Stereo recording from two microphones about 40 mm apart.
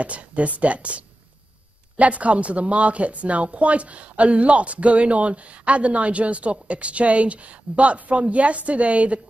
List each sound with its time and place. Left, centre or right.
0.0 s speech: right